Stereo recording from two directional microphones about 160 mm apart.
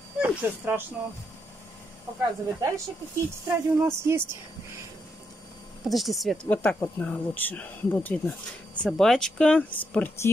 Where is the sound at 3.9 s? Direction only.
15° right (ahead or behind).